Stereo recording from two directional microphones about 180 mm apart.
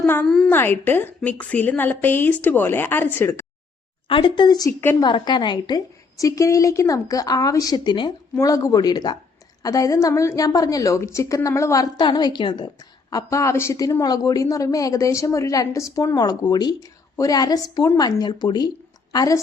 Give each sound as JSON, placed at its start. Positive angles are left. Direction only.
{"t": 0.0, "sound": "a woman's voice", "side_deg": 5}
{"t": 4.1, "sound": "a woman's voice", "side_deg": 25}